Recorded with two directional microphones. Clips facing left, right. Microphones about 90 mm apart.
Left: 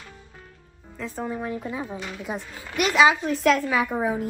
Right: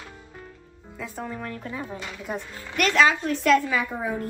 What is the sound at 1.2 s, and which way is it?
A woman's voice, 15° left (ahead or behind).